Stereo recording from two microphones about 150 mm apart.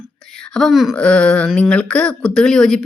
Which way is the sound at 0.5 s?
Centre (ahead or behind).